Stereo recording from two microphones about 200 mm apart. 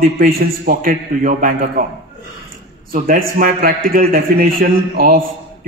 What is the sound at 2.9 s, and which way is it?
A man's voice, 45° right (ahead or behind).